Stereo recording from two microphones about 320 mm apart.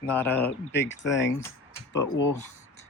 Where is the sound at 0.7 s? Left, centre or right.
Left.